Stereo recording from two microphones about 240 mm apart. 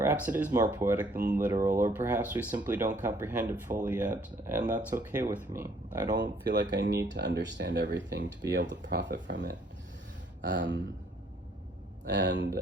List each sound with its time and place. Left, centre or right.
0.0 s speech: centre
6.4 s speech: right
12.0 s speech: right